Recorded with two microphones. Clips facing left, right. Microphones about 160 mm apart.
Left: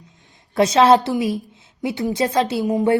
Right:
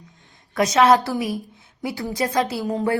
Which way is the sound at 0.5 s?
30° left (ahead or behind).